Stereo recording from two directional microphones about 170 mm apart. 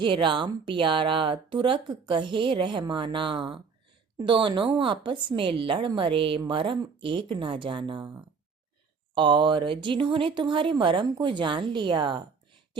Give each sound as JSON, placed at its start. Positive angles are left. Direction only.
{"t": 0.0, "sound": "speech", "side_deg": -30}